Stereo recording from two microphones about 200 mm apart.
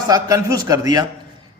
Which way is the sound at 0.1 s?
15° right (ahead or behind).